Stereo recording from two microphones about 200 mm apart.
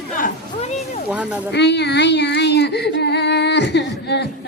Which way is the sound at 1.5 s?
60° left (ahead or behind).